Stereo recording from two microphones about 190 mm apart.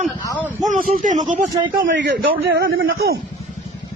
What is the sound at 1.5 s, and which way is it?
Speech, 25° right (ahead or behind).